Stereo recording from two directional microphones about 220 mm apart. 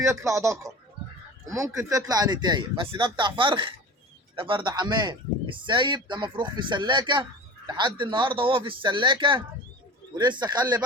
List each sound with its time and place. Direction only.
0.0 s speech: 15° right (ahead or behind)